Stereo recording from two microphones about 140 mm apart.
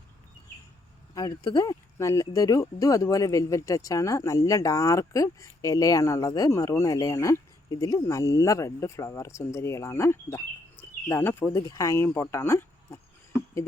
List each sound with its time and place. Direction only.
1.1 s speech: 25° left (ahead or behind)